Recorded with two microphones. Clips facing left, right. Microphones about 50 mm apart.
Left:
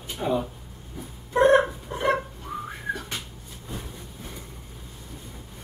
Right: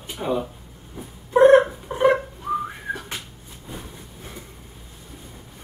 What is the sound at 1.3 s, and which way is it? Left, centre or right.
Cat, centre.